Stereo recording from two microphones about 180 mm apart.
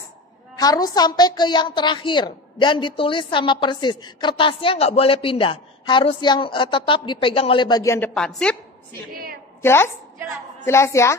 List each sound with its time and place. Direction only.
0.6 s a woman's voice: 20° left (ahead or behind); by 8.6 s 5° left (ahead or behind)
9.1 s a woman's voice: 55° right (ahead or behind)
9.6 s a woman's voice: 15° left (ahead or behind)